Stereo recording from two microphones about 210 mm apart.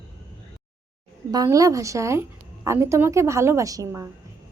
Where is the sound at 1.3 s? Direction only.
15° right (ahead or behind).